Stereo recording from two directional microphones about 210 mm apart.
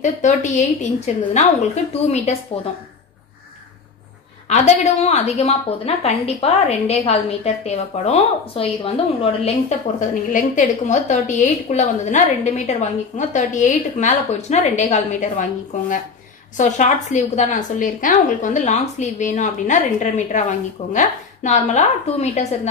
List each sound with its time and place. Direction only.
0.0 s a woman's voice: 35° left (ahead or behind)
4.5 s a woman's voice: 30° left (ahead or behind)
16.5 s a woman's voice: 35° left (ahead or behind)